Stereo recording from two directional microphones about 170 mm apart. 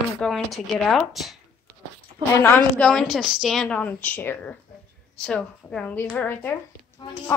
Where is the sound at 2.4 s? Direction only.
15° left (ahead or behind).